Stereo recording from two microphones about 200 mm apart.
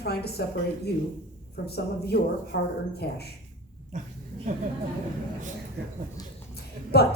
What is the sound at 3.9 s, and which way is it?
Speech, 40° right (ahead or behind).